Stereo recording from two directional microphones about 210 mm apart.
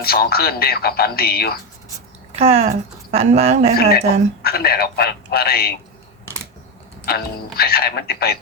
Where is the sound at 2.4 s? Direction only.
30° right (ahead or behind).